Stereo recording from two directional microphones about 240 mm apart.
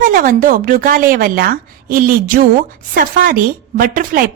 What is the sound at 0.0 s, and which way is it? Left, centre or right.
A woman's voice, right.